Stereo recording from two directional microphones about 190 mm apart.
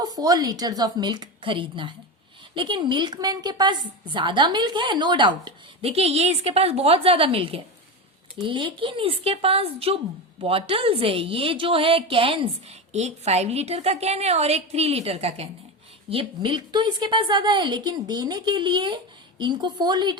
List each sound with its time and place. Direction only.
0.0 s a woman's voice: 20° right (ahead or behind)